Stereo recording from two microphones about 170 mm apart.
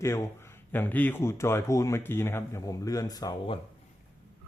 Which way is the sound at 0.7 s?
10° left (ahead or behind).